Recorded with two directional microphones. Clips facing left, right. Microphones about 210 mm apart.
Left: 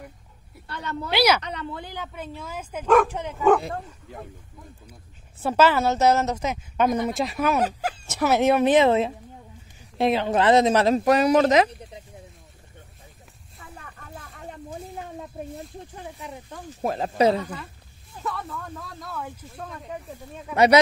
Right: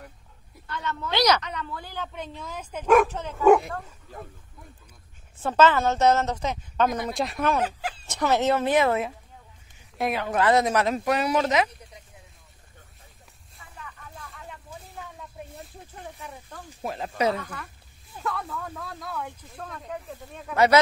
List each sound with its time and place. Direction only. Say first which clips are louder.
0.7 s speech: left 1 dB; 35° left (ahead or behind)
1.1 s a woman's voice: left 2 dB; 10° left (ahead or behind)
1.4 s speech: left 2 dB; 35° left (ahead or behind)
2.0 s a woman's voice: even; 5° left (ahead or behind)
5.4 s a woman's voice: left 1 dB; 10° left (ahead or behind); by 12.0 s 35° left (ahead or behind)
13.6 s a sound: left 1 dB; 50° left (ahead or behind)
16.2 s a woman's voice: left 3 dB; 15° left (ahead or behind)
16.8 s speech: left 5 dB; 35° left (ahead or behind)
17.4 s a woman's voice: left 5 dB; 15° left (ahead or behind)
18.2 s speech: even; centre (ahead or behind)
20.5 s speech: left 2 dB; 20° left (ahead or behind)